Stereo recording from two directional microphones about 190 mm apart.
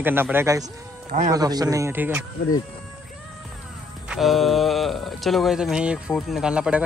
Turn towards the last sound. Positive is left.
turn(degrees=-5)  # may be behind; listen again after turning